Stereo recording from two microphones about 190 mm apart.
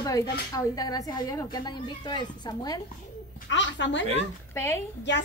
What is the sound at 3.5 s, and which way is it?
Speech, 70° left (ahead or behind).